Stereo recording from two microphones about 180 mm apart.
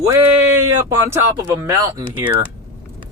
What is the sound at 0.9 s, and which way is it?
Speech, 15° right (ahead or behind).